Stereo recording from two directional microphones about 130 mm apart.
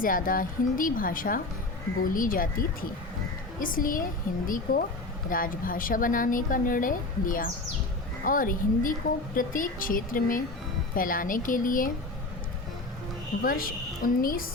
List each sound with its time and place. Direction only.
0.0 s a woman's voice: 90° left
13.4 s a woman's voice: 90° left